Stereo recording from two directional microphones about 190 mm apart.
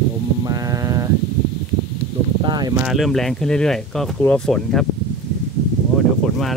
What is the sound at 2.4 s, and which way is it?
Speech, 20° right (ahead or behind).